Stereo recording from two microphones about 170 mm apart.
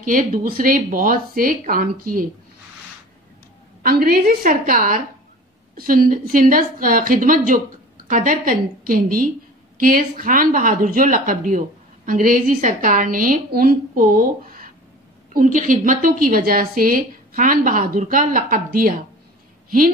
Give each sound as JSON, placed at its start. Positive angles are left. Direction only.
{"t": 0.0, "sound": "a woman's voice", "side_deg": -50}
{"t": 3.8, "sound": "a woman's voice", "side_deg": -60}